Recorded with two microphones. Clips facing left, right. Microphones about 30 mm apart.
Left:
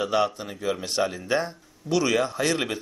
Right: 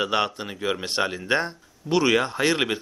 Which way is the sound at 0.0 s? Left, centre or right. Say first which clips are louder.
Even; right.